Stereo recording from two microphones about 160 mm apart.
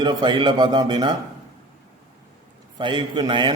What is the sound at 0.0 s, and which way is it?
A man's voice, 30° right (ahead or behind).